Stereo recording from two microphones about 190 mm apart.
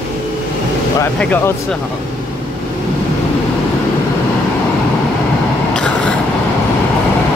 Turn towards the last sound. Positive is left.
turn(degrees=5)  # may be behind; listen again after turning